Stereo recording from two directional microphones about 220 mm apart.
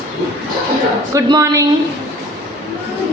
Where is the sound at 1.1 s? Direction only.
15° right (ahead or behind).